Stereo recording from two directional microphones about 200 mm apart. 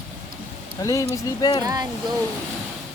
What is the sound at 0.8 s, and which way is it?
Speech, 15° left (ahead or behind).